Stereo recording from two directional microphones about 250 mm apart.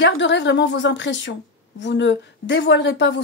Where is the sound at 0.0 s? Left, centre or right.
Left.